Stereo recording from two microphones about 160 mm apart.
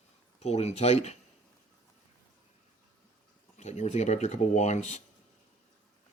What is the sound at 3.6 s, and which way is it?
Speech, 45° left (ahead or behind).